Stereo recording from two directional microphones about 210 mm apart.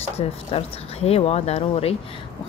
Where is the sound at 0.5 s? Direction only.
30° left (ahead or behind).